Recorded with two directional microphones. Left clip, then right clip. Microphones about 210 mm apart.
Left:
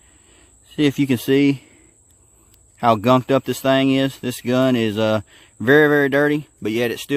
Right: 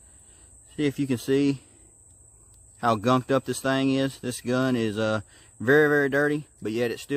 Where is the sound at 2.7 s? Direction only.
35° left (ahead or behind).